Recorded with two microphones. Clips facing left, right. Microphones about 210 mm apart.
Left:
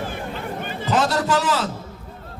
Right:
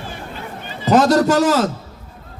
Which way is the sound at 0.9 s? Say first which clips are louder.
Right 8 dB; 40° right (ahead or behind).